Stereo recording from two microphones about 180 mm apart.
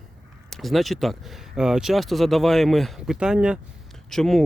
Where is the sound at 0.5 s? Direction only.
Centre (ahead or behind).